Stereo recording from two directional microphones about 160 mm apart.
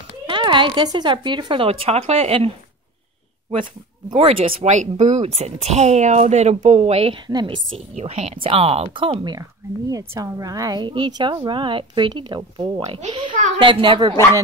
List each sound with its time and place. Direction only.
0.3 s a woman's voice: 30° right (ahead or behind)
4.1 s a woman's voice: 35° right (ahead or behind)
7.2 s a woman's voice: 30° right (ahead or behind)
7.9 s a woman's voice: 40° right (ahead or behind)